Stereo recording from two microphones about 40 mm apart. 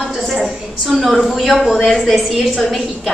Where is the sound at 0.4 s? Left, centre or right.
Centre.